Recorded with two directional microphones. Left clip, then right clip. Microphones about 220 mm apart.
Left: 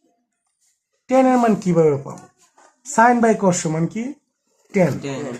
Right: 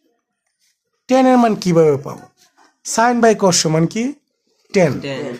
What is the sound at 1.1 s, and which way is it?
A man's voice, 40° right (ahead or behind).